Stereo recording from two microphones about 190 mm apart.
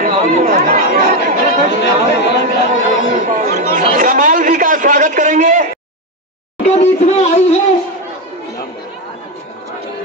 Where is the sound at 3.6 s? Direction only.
45° right (ahead or behind).